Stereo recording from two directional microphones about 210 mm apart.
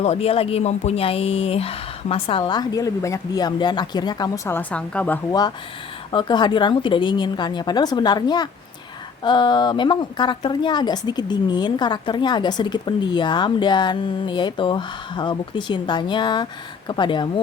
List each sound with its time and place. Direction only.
0.0 s a woman's voice: 30° left (ahead or behind); by 5.2 s 5° left (ahead or behind)
6.1 s a woman's voice: 20° left (ahead or behind)